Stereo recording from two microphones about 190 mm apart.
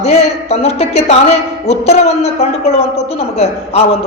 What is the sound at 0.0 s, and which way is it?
A woman's voice, 35° left (ahead or behind).